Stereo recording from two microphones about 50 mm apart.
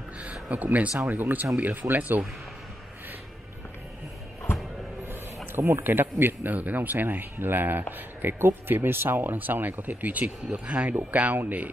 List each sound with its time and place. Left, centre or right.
0.2 s speech: right
5.5 s speech: right